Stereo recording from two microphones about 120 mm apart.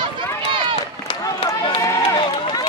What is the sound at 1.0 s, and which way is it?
Run, 50° left (ahead or behind).